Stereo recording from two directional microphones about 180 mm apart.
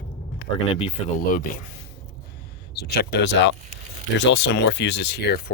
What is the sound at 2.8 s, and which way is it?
Speech, 65° left (ahead or behind).